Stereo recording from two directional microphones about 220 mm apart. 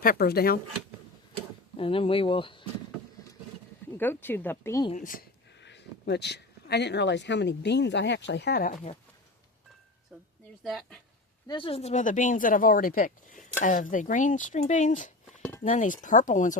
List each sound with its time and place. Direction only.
0.0 s speech: 40° left (ahead or behind)
1.7 s speech: 25° left (ahead or behind)
3.9 s a woman's voice: 10° left (ahead or behind)
4.9 s speech: 35° left (ahead or behind)
5.5 s speech: 50° left (ahead or behind)
10.6 s speech: centre (ahead or behind)
11.4 s speech: 20° left (ahead or behind)
15.4 s cutlery: 5° left (ahead or behind)
15.6 s speech: 35° left (ahead or behind)